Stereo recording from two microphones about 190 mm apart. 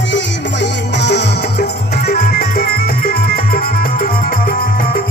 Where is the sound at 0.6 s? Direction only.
65° left (ahead or behind).